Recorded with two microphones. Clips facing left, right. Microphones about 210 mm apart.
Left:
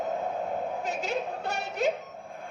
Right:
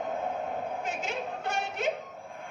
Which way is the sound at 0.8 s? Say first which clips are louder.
Left 3 dB; 40° left (ahead or behind).